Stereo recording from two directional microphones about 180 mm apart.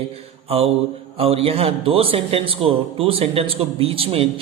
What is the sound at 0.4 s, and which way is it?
Mantra, 35° right (ahead or behind).